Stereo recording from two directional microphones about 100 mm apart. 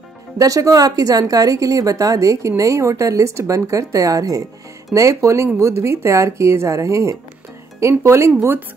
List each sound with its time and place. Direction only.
0.4 s a woman's voice: 35° right (ahead or behind)